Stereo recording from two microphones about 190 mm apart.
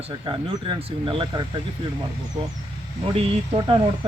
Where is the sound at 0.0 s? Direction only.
30° right (ahead or behind).